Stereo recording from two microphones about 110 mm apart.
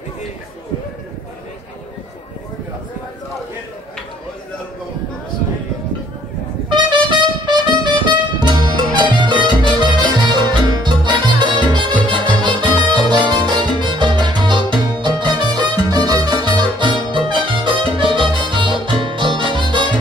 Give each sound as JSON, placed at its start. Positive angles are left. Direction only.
{"t": 6.7, "sound": "music", "side_deg": -45}
{"t": 13.3, "sound": "salsa music", "side_deg": -40}
{"t": 15.7, "sound": "music", "side_deg": -35}